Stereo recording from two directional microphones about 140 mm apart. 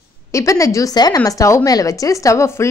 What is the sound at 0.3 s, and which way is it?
Speech, 20° left (ahead or behind).